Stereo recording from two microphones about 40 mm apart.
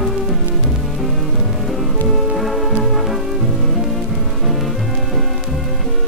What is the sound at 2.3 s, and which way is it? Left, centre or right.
Music, centre.